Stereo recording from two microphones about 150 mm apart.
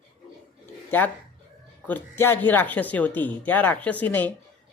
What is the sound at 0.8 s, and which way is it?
Speech, 10° left (ahead or behind).